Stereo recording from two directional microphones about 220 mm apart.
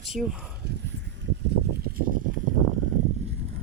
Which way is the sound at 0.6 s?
50° right (ahead or behind).